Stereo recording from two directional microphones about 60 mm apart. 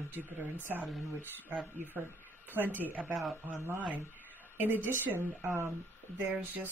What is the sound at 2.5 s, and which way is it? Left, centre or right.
Speech, right.